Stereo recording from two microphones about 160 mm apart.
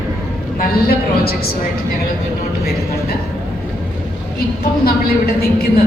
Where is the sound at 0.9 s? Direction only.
70° left (ahead or behind).